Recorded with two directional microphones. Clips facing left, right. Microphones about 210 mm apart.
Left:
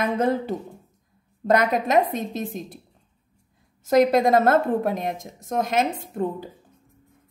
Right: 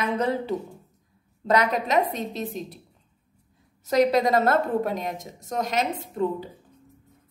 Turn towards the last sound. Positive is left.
turn(degrees=50)  # may be behind; listen again after turning